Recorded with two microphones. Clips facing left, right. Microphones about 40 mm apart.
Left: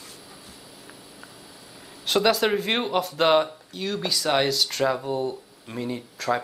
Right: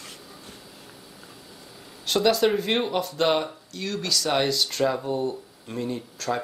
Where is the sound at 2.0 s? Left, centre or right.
Centre.